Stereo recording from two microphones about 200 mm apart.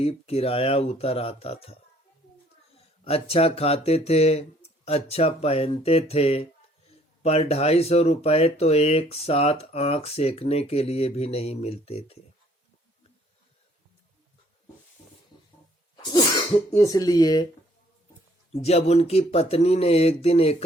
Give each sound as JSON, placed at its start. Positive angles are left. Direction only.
{"t": 0.0, "sound": "speech", "side_deg": 30}
{"t": 2.7, "sound": "speech", "side_deg": 30}
{"t": 16.0, "sound": "speech", "side_deg": 20}
{"t": 18.5, "sound": "speech", "side_deg": 30}